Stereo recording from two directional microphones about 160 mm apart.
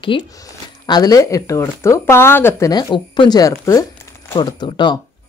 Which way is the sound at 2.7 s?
30° left (ahead or behind).